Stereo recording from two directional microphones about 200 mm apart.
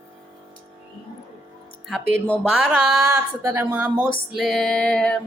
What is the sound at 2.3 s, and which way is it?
Music, 5° right (ahead or behind).